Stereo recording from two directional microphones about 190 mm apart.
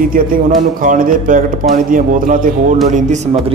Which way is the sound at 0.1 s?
45° right (ahead or behind).